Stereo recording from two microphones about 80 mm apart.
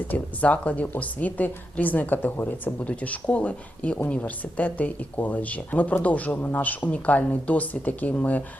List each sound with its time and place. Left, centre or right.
0.1 s a woman's voice: centre